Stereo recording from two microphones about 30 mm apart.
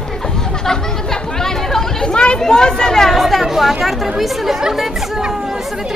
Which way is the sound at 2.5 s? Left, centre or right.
Left.